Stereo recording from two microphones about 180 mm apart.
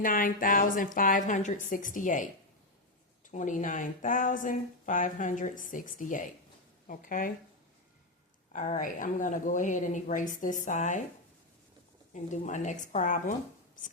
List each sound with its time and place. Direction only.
0.0 s speech: 50° left (ahead or behind)
3.3 s speech: 45° left (ahead or behind)
8.5 s speech: 45° left (ahead or behind)
12.1 s speech: 40° left (ahead or behind)